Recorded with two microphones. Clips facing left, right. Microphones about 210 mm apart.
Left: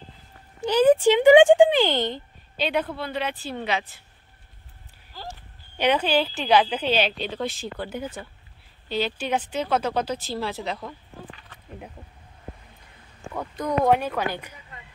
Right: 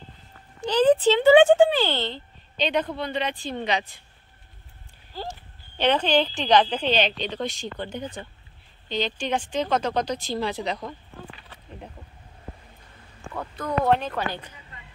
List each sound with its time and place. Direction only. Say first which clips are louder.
0.7 s a sound: left 1 dB; 10° left (ahead or behind)
3.0 s a woman's voice: right 1 dB; 5° left (ahead or behind)
5.8 s a woman's voice: even; 10° left (ahead or behind)
13.3 s a woman's voice: left 2 dB; 15° left (ahead or behind)